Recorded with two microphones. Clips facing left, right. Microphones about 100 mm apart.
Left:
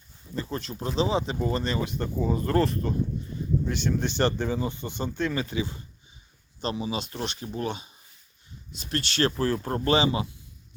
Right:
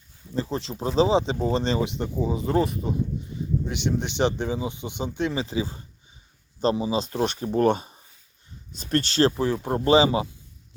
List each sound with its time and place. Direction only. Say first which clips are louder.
0.5 s speech: right 5 dB; 25° right (ahead or behind)
9.3 s speech: right 2 dB; 10° right (ahead or behind); by 10.2 s 30° right (ahead or behind)